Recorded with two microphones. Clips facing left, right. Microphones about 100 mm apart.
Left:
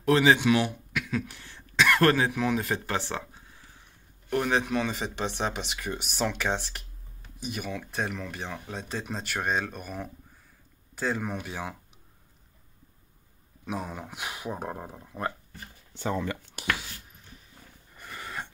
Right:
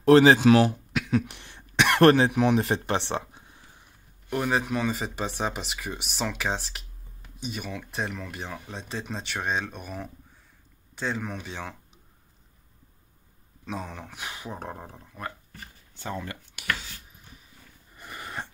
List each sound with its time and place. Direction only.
0.0 s speech: 35° right (ahead or behind); by 3.8 s 15° right (ahead or behind)
4.3 s speech: 5° right (ahead or behind); by 11.7 s 10° left (ahead or behind)
13.7 s speech: 10° left (ahead or behind)
16.6 s speech: 40° left (ahead or behind)
17.9 s a sound: 15° right (ahead or behind)